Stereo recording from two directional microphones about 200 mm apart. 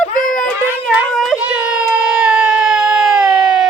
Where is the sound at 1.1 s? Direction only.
Centre (ahead or behind).